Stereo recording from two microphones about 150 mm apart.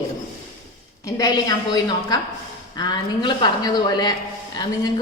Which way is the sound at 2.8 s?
30° left (ahead or behind).